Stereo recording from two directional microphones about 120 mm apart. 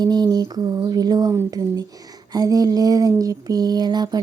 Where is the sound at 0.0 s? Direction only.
35° right (ahead or behind).